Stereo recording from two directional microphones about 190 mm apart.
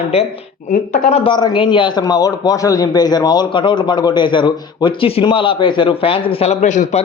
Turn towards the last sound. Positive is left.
turn(degrees=40)  # may be behind; listen again after turning